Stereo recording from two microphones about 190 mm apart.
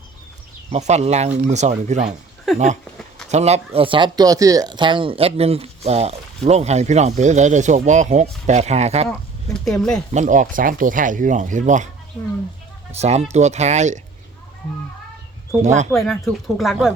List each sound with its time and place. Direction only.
0.7 s speech: 35° right (ahead or behind)
2.5 s speech: centre (ahead or behind)
3.2 s speech: 35° right (ahead or behind)
9.0 s speech: 5° left (ahead or behind)
10.1 s speech: 40° right (ahead or behind)
12.9 s speech: 35° right (ahead or behind)
15.6 s speech: 40° right (ahead or behind)
15.9 s speech: centre (ahead or behind)